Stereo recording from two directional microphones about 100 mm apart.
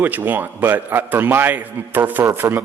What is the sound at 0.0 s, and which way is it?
Speech, 20° right (ahead or behind).